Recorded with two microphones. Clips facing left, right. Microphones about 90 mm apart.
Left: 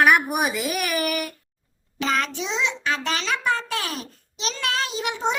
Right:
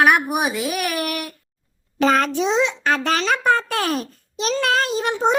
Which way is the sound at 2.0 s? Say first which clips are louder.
Right 8 dB; 45° right (ahead or behind).